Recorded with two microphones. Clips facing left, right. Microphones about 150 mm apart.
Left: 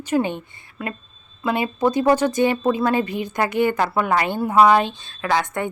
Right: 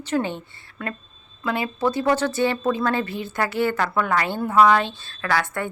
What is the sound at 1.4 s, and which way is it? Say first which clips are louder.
A woman's voice: left 3 dB; 20° left (ahead or behind).